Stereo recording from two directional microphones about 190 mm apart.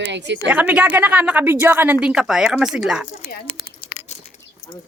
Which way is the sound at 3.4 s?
35° left (ahead or behind).